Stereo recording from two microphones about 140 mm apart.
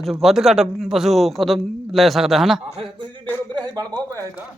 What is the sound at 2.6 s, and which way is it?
Speech, 45° right (ahead or behind).